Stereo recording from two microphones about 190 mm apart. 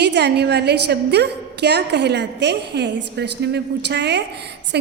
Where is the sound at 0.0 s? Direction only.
60° right (ahead or behind).